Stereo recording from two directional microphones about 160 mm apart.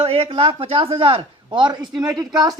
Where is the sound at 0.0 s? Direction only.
35° right (ahead or behind).